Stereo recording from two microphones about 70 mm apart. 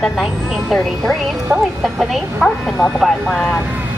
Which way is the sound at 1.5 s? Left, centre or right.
Centre.